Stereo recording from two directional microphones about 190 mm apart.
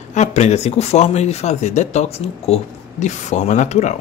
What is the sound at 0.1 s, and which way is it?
Speech, 35° left (ahead or behind).